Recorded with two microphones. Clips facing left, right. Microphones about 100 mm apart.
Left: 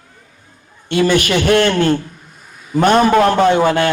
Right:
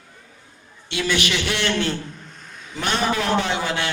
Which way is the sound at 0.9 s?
45° left (ahead or behind).